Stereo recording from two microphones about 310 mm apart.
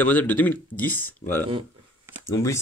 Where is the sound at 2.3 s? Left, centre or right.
Centre.